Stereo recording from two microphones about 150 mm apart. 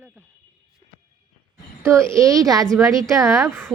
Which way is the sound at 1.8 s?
20° right (ahead or behind).